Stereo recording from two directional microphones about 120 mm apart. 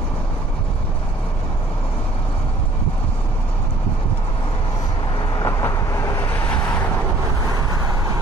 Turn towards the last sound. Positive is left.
turn(degrees=15)  # may be behind; listen again after turning